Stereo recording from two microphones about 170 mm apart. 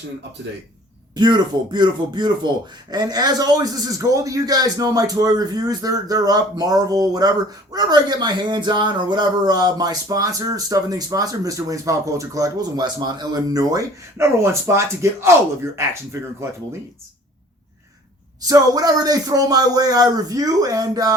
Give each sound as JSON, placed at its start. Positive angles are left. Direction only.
{"t": 1.1, "sound": "speech", "side_deg": -25}
{"t": 18.4, "sound": "speech", "side_deg": -20}